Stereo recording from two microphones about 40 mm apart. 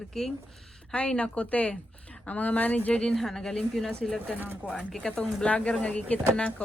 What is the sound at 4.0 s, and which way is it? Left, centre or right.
Speech, left.